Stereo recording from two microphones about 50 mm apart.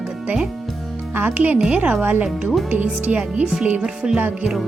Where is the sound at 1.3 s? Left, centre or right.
Right.